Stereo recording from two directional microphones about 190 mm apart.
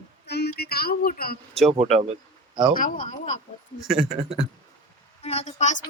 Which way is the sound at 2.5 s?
25° right (ahead or behind).